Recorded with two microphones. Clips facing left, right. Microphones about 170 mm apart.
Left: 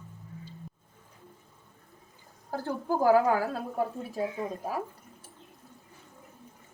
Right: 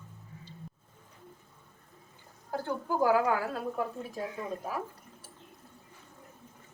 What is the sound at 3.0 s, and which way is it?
Speech, 35° left (ahead or behind).